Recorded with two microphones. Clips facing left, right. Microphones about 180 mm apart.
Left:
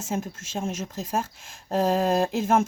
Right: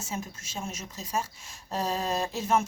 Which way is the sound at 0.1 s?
55° left (ahead or behind).